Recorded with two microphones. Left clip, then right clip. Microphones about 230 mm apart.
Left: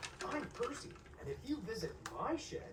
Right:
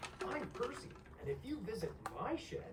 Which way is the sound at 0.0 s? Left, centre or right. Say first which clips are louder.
Even; right.